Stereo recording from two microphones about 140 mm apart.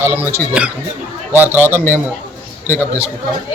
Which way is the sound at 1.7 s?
15° left (ahead or behind).